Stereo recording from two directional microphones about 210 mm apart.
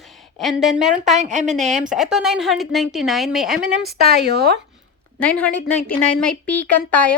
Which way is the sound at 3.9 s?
45° right (ahead or behind).